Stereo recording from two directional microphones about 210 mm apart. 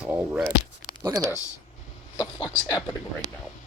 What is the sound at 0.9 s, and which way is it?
Speech, 20° right (ahead or behind).